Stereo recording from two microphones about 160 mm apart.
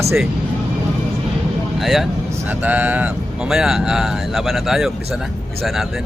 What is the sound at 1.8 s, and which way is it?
Speech, centre (ahead or behind).